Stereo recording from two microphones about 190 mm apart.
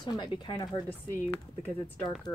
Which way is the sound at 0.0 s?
25° left (ahead or behind).